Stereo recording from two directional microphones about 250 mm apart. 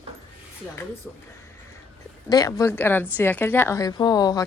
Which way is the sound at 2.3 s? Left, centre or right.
Centre.